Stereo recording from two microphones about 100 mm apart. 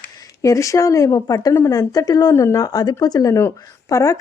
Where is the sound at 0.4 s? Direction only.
35° left (ahead or behind).